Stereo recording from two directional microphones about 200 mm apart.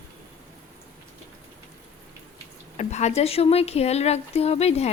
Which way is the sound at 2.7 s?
35° left (ahead or behind).